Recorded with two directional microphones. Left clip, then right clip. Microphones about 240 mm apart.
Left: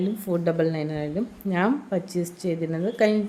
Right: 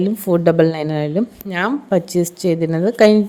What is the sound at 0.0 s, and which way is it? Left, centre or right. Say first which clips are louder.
A woman's voice: right 10 dB; right.